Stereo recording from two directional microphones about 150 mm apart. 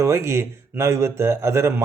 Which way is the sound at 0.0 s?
20° right (ahead or behind).